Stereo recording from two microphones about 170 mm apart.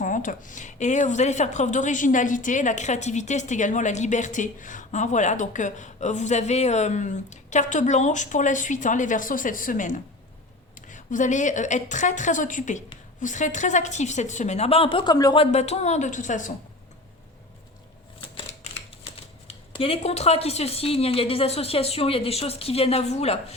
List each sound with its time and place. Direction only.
0.0 s a woman's voice: 50° left (ahead or behind); by 15.4 s 25° left (ahead or behind)
15.5 s a woman's voice: 40° left (ahead or behind)
18.3 s speech: 35° left (ahead or behind)